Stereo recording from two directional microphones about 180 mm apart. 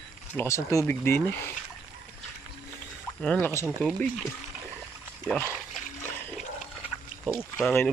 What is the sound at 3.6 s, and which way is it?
Speech, 5° right (ahead or behind).